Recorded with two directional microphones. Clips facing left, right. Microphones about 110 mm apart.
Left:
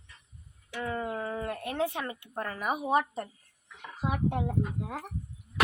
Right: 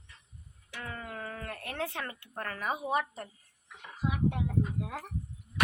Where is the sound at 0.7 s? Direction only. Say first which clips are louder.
Left 8 dB; 25° left (ahead or behind).